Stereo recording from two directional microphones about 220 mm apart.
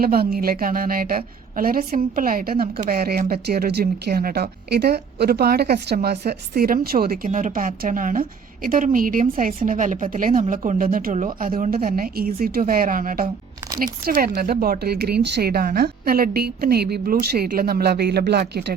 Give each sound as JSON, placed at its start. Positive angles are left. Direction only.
{"t": 0.0, "sound": "a woman's voice", "side_deg": -45}